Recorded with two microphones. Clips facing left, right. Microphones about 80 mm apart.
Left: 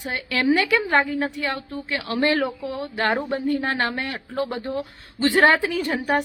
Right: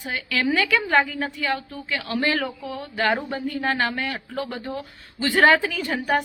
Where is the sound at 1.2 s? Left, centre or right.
Left.